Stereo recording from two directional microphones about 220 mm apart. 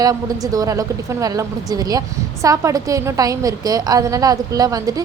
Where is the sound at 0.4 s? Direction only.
15° right (ahead or behind).